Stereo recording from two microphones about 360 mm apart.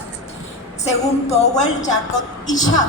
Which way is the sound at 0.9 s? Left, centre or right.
Centre.